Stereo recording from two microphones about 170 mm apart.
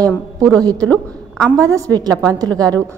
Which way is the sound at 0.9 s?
5° left (ahead or behind).